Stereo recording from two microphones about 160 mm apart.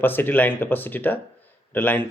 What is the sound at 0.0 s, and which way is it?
Speech, 10° left (ahead or behind).